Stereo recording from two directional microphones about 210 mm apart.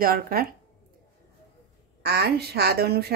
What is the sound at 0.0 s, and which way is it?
Speech, 45° right (ahead or behind).